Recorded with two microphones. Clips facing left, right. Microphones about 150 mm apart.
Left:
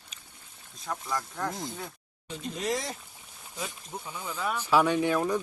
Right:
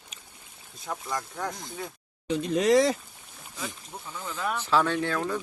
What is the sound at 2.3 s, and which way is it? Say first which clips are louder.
Speech: right 9 dB; 80° right.